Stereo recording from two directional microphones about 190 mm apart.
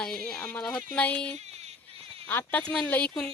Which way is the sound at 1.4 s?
35° right (ahead or behind).